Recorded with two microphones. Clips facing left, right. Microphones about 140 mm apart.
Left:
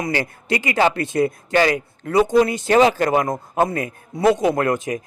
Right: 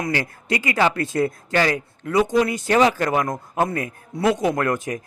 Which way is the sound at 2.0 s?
35° left (ahead or behind).